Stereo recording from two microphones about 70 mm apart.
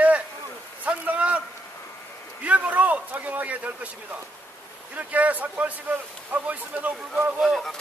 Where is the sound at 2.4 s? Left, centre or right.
Right.